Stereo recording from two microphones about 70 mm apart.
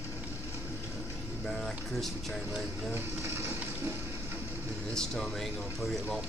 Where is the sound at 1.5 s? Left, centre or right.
Centre.